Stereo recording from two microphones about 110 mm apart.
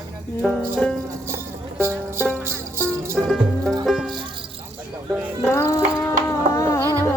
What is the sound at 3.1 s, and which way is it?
Music, 5° left (ahead or behind).